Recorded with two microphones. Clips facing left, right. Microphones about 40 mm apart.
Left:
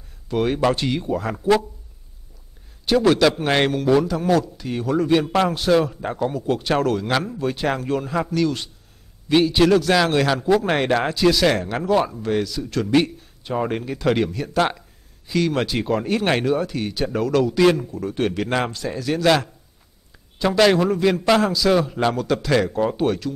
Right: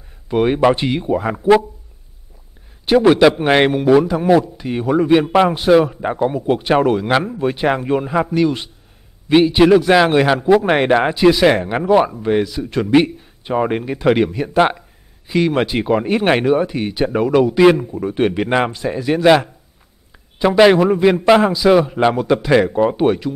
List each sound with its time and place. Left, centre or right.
0.3 s a man's voice: right
2.8 s a man's voice: right